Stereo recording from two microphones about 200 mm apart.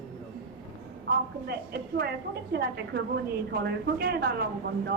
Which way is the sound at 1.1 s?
50° right (ahead or behind).